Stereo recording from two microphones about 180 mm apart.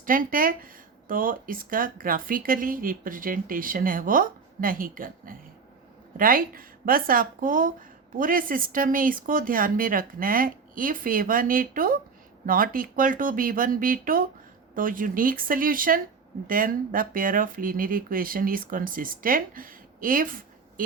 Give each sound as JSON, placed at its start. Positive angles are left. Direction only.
{"t": 0.0, "sound": "a woman's voice", "side_deg": -50}